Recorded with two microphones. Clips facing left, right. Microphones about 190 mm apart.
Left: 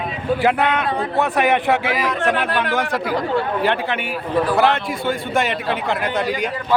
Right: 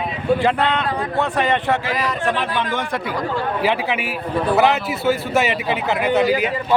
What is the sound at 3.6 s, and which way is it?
Speech, 5° right (ahead or behind).